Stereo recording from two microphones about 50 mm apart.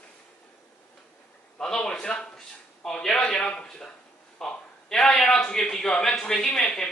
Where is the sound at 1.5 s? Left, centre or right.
Centre.